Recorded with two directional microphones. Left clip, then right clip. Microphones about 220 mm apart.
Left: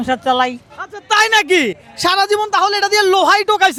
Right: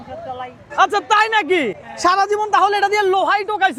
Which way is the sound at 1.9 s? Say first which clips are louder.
Left 1 dB; 10° left (ahead or behind).